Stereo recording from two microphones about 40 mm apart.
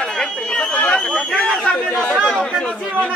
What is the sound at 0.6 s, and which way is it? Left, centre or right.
Chatter, left.